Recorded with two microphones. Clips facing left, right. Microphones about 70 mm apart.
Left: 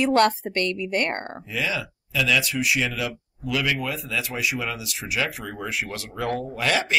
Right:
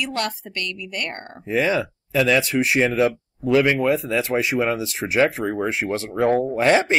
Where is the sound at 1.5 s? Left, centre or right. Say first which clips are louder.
Right 8 dB; right.